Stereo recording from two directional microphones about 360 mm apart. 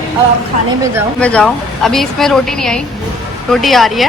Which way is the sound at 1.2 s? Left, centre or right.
Centre.